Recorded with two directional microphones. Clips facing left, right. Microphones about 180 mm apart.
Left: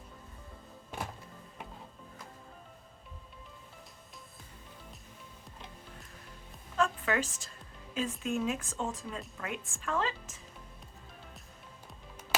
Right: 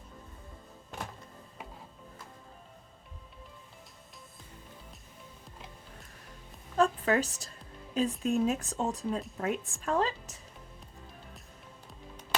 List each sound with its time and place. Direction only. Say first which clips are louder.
6.7 s music: right 4 dB; 35° right (ahead or behind)
7.9 s speech: right 5 dB; 35° right (ahead or behind)